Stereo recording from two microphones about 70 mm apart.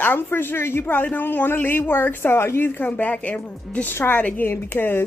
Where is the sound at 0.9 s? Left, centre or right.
Left.